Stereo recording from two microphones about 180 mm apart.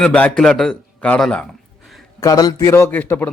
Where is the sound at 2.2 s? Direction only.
20° left (ahead or behind).